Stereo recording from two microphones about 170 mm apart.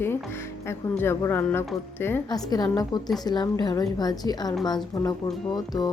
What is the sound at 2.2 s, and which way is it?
A woman's voice, 25° left (ahead or behind).